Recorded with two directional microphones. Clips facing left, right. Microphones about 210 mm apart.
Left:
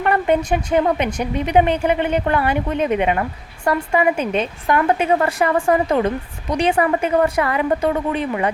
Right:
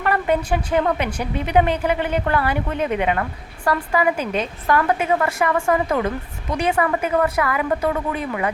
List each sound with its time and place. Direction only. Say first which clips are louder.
0.0 s a woman's voice: left 3 dB; 20° left (ahead or behind)